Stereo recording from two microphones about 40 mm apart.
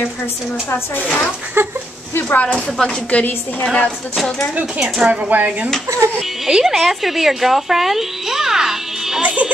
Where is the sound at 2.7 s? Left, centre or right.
Centre.